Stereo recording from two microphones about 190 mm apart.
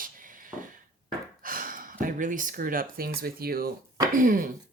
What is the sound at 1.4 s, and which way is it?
Speech, 45° right (ahead or behind).